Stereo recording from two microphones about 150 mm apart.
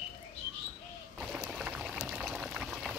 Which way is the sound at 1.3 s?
5° right (ahead or behind).